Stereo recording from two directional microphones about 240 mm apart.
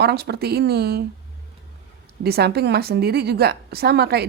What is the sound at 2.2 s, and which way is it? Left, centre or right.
A woman's voice, right.